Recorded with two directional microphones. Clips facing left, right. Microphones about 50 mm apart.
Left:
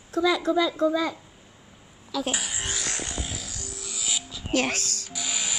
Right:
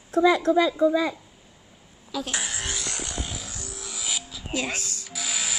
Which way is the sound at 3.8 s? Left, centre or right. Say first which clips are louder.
Even; centre.